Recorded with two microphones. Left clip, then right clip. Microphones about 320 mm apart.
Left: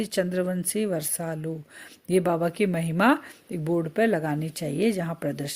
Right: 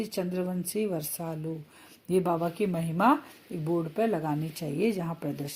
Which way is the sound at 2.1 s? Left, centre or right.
Left.